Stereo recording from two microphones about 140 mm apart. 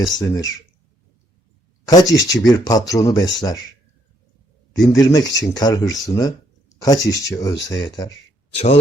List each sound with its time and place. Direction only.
0.0 s speech: 25° left (ahead or behind)
1.9 s speech: 25° left (ahead or behind)
4.8 s speech: 25° left (ahead or behind)
8.5 s speech: 45° left (ahead or behind)